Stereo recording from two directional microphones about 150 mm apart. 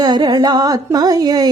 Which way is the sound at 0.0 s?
25° right (ahead or behind).